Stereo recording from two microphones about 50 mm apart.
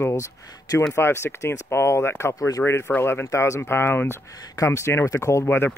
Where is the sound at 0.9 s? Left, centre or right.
Left.